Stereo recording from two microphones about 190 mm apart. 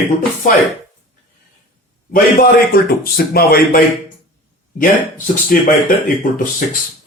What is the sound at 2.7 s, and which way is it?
Speech, 55° left (ahead or behind).